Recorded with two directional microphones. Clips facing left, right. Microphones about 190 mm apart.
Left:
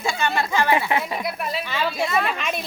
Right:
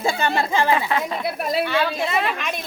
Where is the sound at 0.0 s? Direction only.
35° right (ahead or behind).